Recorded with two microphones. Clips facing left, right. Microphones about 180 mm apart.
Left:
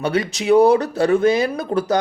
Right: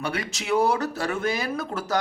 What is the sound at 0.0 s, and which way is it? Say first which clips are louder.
Speech: left 9 dB; 20° left (ahead or behind).